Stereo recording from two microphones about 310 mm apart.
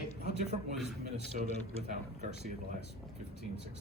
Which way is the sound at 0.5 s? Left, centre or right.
Right.